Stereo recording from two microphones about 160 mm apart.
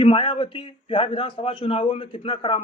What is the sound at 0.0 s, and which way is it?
Speech, 35° left (ahead or behind).